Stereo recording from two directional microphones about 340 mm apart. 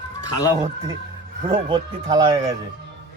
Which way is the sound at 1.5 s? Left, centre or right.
Centre.